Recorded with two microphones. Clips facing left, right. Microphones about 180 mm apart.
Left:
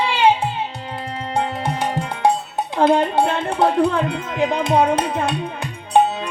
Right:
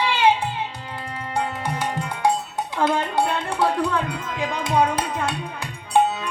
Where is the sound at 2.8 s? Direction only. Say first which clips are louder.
Left 6 dB; 20° left (ahead or behind).